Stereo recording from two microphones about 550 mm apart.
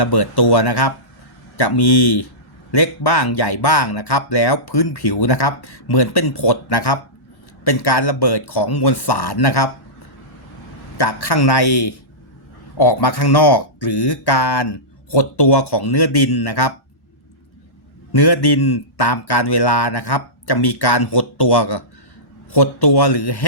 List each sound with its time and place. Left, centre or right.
0.0 s speech: left
10.9 s speech: left
18.1 s speech: left